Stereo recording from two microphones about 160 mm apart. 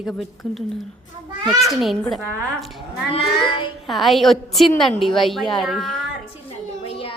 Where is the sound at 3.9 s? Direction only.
Centre (ahead or behind).